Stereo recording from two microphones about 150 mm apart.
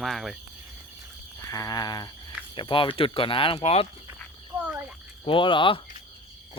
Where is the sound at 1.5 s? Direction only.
25° left (ahead or behind).